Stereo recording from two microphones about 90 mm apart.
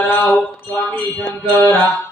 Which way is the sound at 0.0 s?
25° left (ahead or behind).